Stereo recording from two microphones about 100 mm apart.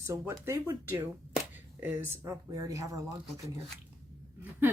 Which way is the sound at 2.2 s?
35° right (ahead or behind).